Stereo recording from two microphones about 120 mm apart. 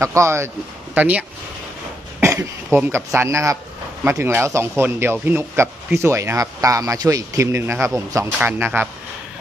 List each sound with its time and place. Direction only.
0.0 s a man's voice: 25° right (ahead or behind)
0.9 s a man's voice: 10° right (ahead or behind)
8.3 s speech: 15° right (ahead or behind)